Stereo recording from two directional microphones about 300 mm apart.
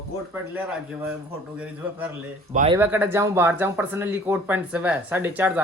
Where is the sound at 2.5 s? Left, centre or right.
Right.